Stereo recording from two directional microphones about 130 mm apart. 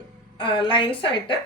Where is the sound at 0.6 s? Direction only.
40° left (ahead or behind).